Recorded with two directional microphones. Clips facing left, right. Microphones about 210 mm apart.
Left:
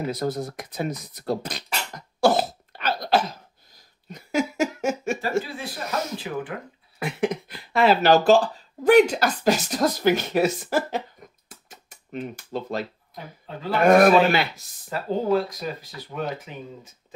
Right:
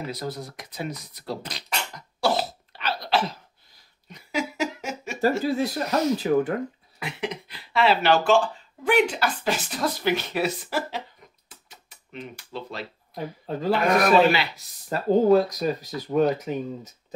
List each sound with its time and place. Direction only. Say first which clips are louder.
0.1 s speech: left 6 dB; 50° left (ahead or behind)
2.0 s cough: left 5 dB; 50° left (ahead or behind)
4.1 s laughter: left 4 dB; 45° left (ahead or behind)
5.4 s speech: right 9 dB; 40° right (ahead or behind)
7.0 s speech: left 6 dB; 50° left (ahead or behind)
11.4 s a sound: left 4 dB; 45° left (ahead or behind)
13.5 s speech: right 6 dB; 40° right (ahead or behind)
13.8 s speech: left 4 dB; 45° left (ahead or behind)
14.9 s speech: right 5 dB; 40° right (ahead or behind)